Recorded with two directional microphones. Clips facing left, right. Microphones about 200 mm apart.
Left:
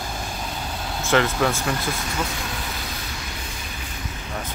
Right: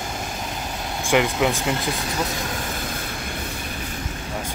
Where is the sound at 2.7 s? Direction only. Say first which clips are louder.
Right 4 dB; 50° right (ahead or behind).